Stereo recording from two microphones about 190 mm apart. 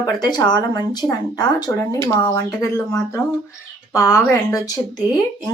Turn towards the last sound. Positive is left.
turn(degrees=20)  # may be behind; listen again after turning